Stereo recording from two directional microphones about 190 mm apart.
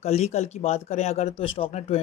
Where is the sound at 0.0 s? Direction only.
35° left (ahead or behind).